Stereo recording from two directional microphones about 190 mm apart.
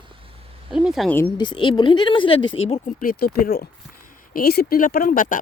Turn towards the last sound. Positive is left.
turn(degrees=45)  # may be behind; listen again after turning